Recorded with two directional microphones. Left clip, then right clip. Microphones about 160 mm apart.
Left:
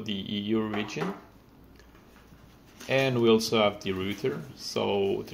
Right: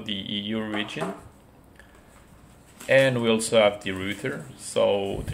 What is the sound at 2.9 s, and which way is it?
Speech, 35° left (ahead or behind).